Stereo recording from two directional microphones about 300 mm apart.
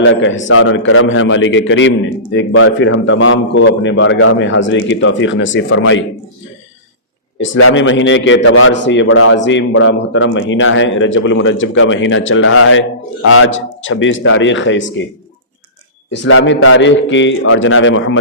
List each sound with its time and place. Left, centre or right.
0.0 s a man's voice: left
7.3 s a man's voice: left
16.0 s a man's voice: left